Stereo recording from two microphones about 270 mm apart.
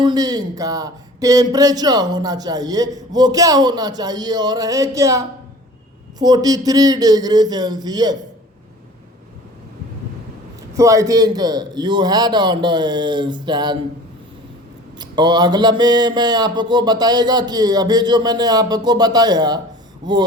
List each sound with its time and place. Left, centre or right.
0.0 s speech: centre
10.8 s speech: centre
14.9 s speech: centre